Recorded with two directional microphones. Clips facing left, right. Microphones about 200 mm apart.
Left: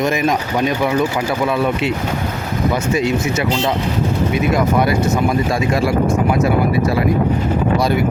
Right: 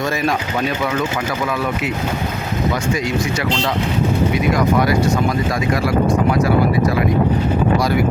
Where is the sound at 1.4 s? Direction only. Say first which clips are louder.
Left 6 dB; 30° left (ahead or behind).